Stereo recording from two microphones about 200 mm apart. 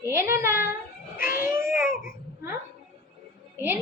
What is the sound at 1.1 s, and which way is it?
Speech, 45° left (ahead or behind).